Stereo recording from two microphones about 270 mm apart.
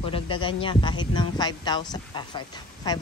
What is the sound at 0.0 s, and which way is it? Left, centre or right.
Speech, centre.